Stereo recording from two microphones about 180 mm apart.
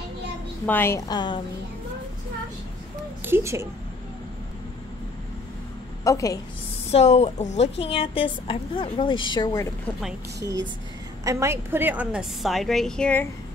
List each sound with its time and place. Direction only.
0.7 s a woman's voice: 10° left (ahead or behind)
3.3 s speech: 15° right (ahead or behind)
6.0 s a woman's voice: 20° left (ahead or behind)
6.9 s a woman's voice: 35° left (ahead or behind)
11.2 s a woman's voice: 15° right (ahead or behind); by 13.3 s 5° left (ahead or behind)